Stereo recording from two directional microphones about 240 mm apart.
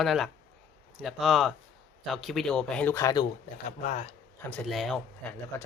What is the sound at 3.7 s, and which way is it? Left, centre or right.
Speech, left.